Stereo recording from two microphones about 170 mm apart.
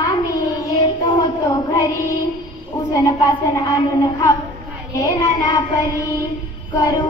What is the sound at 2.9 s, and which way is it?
Child singing, 20° left (ahead or behind).